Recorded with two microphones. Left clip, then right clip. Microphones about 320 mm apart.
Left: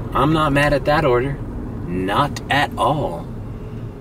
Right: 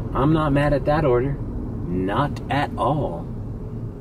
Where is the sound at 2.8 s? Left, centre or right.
Right.